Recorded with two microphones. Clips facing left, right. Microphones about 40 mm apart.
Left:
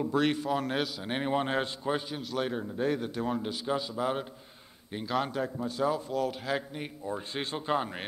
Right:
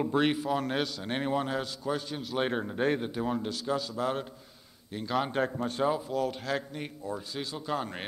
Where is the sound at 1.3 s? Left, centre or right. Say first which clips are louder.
Left 1 dB; left.